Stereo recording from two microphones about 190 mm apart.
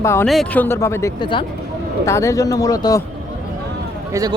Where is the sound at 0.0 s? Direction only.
15° left (ahead or behind).